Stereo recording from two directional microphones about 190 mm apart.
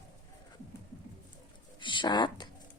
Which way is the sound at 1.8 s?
25° left (ahead or behind).